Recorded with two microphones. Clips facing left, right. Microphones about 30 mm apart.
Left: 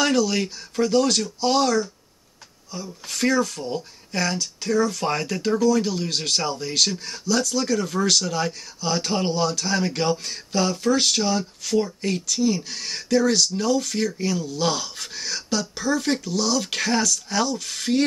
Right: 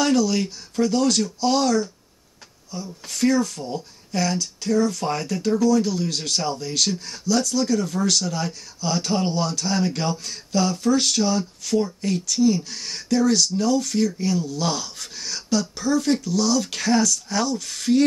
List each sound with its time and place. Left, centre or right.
0.0 s speech: left
2.7 s speech: left
8.5 s speech: left